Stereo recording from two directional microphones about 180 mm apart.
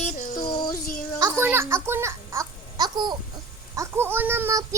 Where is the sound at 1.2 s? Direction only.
20° right (ahead or behind).